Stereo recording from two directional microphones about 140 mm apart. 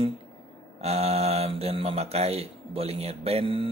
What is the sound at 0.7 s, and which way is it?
Speech, 50° right (ahead or behind).